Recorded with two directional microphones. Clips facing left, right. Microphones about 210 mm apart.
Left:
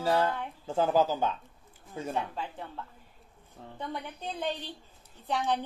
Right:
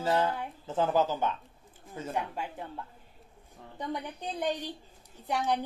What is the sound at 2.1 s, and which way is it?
Speech, 15° right (ahead or behind).